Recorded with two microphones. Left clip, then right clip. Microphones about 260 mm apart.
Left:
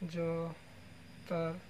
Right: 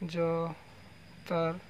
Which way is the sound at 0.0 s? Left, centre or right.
Right.